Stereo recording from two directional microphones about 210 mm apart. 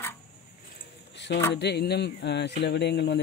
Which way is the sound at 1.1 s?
55° left (ahead or behind).